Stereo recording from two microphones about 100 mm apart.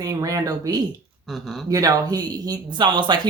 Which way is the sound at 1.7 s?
35° right (ahead or behind).